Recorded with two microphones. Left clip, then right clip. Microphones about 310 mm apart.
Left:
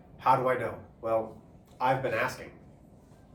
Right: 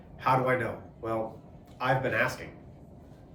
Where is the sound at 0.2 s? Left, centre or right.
Centre.